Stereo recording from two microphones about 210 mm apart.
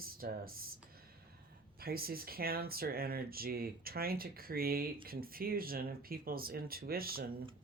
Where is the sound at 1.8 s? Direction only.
45° right (ahead or behind).